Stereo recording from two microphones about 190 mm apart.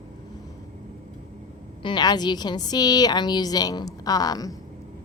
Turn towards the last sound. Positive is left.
turn(degrees=20)  # may be behind; listen again after turning